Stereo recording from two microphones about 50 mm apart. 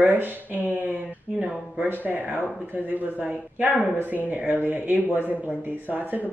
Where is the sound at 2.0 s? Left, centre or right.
Right.